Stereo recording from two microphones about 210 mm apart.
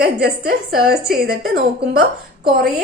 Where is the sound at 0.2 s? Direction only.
45° right (ahead or behind).